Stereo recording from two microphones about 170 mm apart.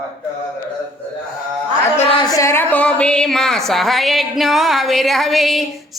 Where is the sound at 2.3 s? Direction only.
15° left (ahead or behind).